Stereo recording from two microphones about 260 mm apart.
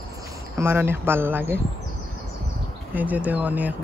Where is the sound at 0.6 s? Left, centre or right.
Centre.